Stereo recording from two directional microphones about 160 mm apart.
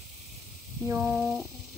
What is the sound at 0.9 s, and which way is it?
Speech, 10° right (ahead or behind).